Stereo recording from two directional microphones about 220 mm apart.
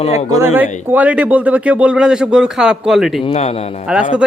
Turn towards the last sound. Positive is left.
turn(degrees=-5)  # may be behind; listen again after turning